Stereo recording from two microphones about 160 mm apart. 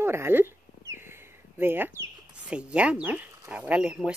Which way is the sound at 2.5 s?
5° right (ahead or behind).